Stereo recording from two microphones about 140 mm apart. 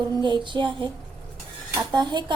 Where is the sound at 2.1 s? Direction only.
35° right (ahead or behind).